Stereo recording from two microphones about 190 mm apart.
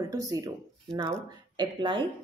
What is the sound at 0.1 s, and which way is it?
Speech, 20° right (ahead or behind).